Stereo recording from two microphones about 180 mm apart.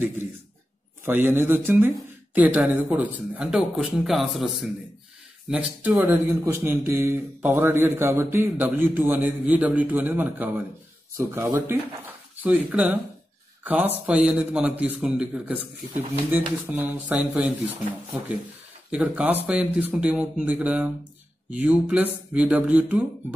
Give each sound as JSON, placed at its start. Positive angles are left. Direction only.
{"t": 1.0, "sound": "a man's voice", "side_deg": -10}
{"t": 18.9, "sound": "a man's voice", "side_deg": -5}